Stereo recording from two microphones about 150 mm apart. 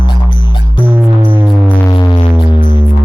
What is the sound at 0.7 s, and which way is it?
Music, 15° right (ahead or behind).